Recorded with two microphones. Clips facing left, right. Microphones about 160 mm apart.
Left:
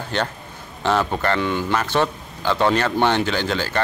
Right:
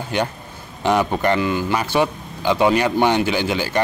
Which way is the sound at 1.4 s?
5° right (ahead or behind).